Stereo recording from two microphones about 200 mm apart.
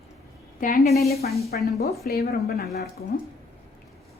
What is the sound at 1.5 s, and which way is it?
A woman's voice, 50° left (ahead or behind).